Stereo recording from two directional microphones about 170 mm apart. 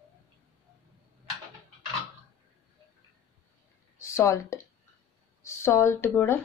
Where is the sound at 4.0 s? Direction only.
15° left (ahead or behind).